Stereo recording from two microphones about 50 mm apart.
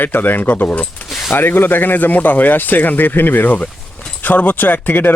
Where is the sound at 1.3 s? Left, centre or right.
Left.